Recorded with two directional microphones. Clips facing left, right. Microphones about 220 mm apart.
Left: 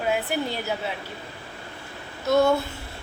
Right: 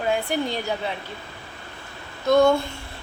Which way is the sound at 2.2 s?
5° left (ahead or behind).